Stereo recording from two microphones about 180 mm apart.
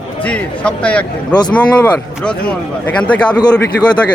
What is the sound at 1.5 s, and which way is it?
Speech, 5° left (ahead or behind).